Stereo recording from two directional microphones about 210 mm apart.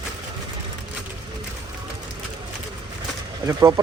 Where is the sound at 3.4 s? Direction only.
15° right (ahead or behind).